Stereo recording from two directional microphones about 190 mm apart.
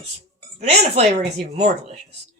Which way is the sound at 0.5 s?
35° right (ahead or behind).